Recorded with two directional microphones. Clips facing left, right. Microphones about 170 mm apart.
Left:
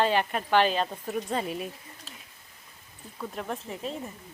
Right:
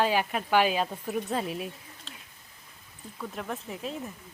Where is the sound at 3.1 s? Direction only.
5° left (ahead or behind).